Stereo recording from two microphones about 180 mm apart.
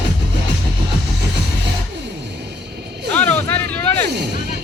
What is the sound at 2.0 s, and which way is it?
Music, 70° right (ahead or behind).